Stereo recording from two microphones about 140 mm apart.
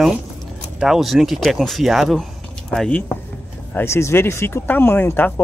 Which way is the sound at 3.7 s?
20° left (ahead or behind).